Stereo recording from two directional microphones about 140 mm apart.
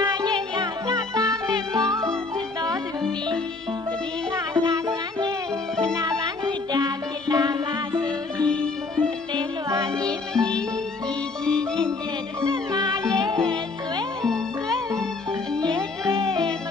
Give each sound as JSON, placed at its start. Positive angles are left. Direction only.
{"t": 0.0, "sound": "music", "side_deg": -25}
{"t": 4.6, "sound": "music", "side_deg": -25}
{"t": 8.4, "sound": "music", "side_deg": 5}
{"t": 9.3, "sound": "music", "side_deg": -25}
{"t": 10.3, "sound": "music", "side_deg": 5}
{"t": 12.4, "sound": "music", "side_deg": -30}
{"t": 16.2, "sound": "music", "side_deg": -30}